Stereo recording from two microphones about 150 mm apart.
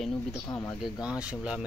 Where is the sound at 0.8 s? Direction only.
5° right (ahead or behind).